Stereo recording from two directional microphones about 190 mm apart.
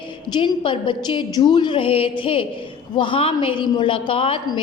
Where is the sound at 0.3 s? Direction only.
25° left (ahead or behind).